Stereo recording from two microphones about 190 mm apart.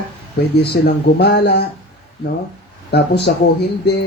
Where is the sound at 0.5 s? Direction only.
60° left (ahead or behind).